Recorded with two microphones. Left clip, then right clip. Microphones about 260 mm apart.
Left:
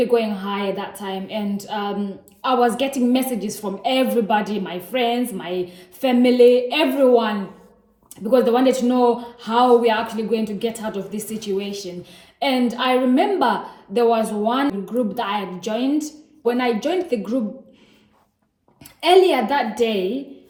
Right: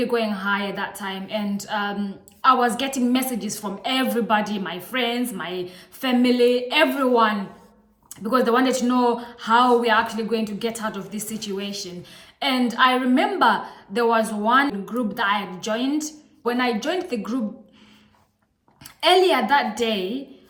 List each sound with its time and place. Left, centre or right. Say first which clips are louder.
0.0 s a woman's voice: left 4 dB; centre
18.8 s a woman's voice: left 3 dB; centre